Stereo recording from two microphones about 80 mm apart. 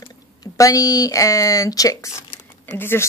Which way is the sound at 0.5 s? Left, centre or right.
Left.